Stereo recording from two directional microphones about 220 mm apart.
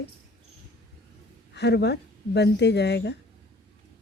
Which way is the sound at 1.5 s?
50° left (ahead or behind).